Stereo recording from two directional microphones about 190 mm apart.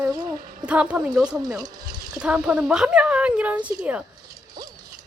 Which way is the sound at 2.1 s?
5° right (ahead or behind).